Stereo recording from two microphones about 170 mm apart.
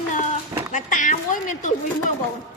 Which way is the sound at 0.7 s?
50° left (ahead or behind).